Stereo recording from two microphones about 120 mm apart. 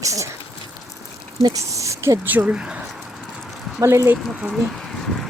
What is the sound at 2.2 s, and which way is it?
Speech, 10° right (ahead or behind).